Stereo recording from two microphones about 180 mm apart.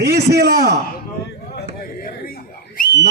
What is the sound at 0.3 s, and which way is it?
Speech, 60° right (ahead or behind).